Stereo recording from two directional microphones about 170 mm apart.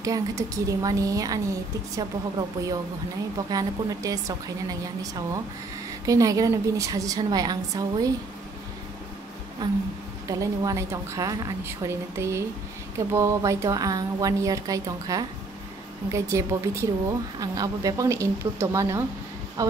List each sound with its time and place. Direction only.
0.0 s a woman's voice: 20° right (ahead or behind)
9.6 s a woman's voice: 25° right (ahead or behind)
16.3 s a woman's voice: 20° right (ahead or behind)